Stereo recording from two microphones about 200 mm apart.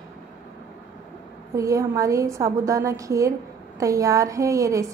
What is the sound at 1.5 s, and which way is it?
A woman's voice, 15° right (ahead or behind).